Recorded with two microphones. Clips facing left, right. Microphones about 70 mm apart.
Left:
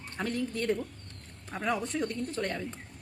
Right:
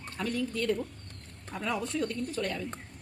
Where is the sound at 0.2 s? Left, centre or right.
Left.